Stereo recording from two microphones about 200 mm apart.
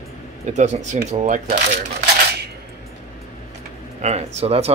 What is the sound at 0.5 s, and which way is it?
Speech, 35° right (ahead or behind).